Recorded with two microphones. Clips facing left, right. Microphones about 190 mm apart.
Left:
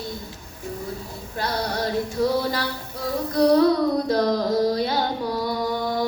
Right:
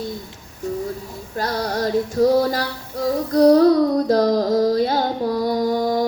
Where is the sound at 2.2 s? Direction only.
45° right (ahead or behind).